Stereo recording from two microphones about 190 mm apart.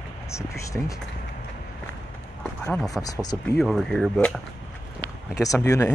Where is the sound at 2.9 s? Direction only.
20° left (ahead or behind).